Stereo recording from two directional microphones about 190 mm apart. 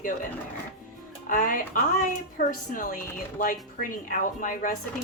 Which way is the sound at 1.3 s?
45° left (ahead or behind).